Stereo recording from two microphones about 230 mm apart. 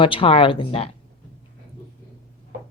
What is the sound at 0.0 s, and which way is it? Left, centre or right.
Speech, left.